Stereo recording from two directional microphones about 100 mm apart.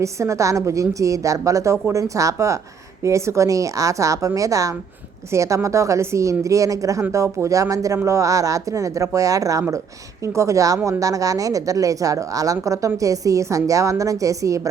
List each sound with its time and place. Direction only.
0.0 s a woman's voice: 30° right (ahead or behind)